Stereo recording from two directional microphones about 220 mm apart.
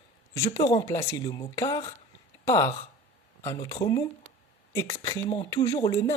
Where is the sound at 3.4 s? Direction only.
15° left (ahead or behind).